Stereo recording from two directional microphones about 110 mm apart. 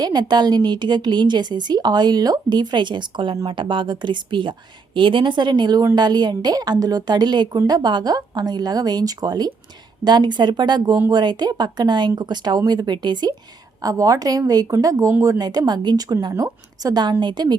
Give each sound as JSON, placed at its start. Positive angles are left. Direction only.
{"t": 0.0, "sound": "a woman's voice", "side_deg": -40}